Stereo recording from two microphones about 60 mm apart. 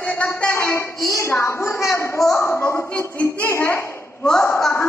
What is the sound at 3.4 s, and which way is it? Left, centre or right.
A woman's voice, left.